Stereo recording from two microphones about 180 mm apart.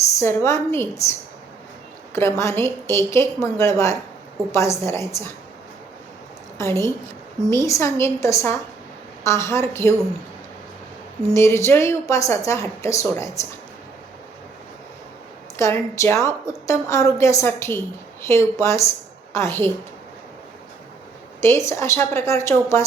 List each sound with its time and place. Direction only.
0.2 s a woman's voice: 15° left (ahead or behind)
2.1 s a woman's voice: 15° left (ahead or behind)
6.6 s a woman's voice: 15° left (ahead or behind)
11.3 s a woman's voice: 15° left (ahead or behind)
15.5 s a woman's voice: 15° left (ahead or behind)
21.4 s a woman's voice: 15° left (ahead or behind)